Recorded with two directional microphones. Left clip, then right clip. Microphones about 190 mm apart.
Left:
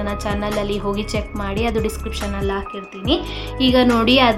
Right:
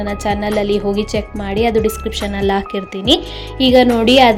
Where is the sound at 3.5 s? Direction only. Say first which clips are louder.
Right 5 dB; 15° right (ahead or behind).